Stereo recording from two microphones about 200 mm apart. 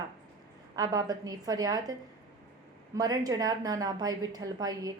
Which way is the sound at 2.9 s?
20° right (ahead or behind).